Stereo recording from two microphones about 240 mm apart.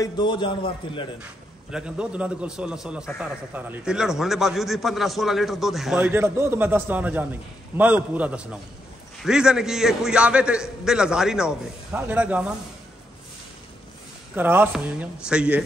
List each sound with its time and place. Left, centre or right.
0.0 s a man's voice: centre
1.2 s a man's voice: centre
14.3 s speech: centre